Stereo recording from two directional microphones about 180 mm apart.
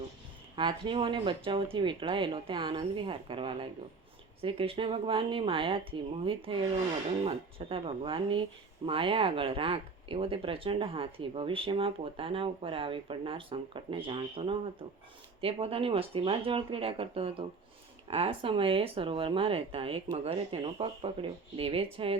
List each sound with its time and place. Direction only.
0.5 s speech: 30° right (ahead or behind)